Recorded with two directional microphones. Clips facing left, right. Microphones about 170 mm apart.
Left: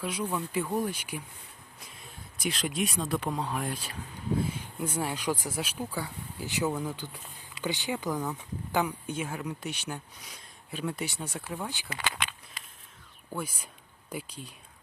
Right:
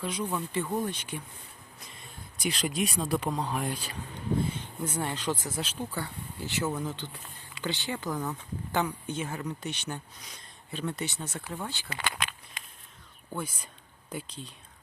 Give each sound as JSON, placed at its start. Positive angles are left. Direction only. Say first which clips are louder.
{"t": 0.0, "sound": "speech", "louder": "even", "side_deg": 5}
{"t": 13.3, "sound": "speech", "louder": "even", "side_deg": 10}